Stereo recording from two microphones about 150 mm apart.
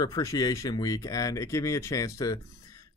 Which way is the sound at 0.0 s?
25° left (ahead or behind).